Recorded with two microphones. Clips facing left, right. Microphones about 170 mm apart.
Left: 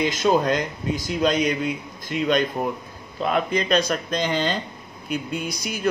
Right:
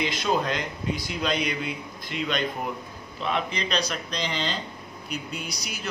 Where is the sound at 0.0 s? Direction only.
45° left (ahead or behind).